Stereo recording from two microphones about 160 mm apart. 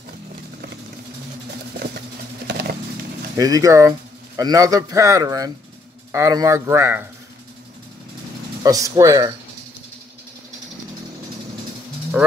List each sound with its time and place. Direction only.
1.8 s vehicle: 85° right
3.3 s a man's voice: 20° right (ahead or behind)
8.6 s a man's voice: 20° right (ahead or behind)
12.2 s speech: 10° right (ahead or behind)